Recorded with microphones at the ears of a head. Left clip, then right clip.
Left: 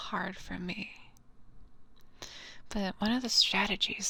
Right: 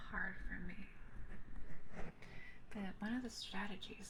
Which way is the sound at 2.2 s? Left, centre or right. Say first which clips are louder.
Left 11 dB; left.